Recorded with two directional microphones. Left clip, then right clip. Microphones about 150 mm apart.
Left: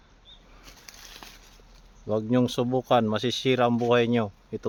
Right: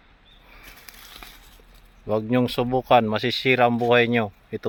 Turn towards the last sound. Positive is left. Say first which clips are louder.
# right 4 dB
turn(degrees=-10)  # may be behind; listen again after turning